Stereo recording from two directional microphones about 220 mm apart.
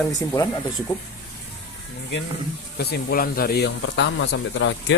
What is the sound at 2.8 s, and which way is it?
Speech, 45° left (ahead or behind).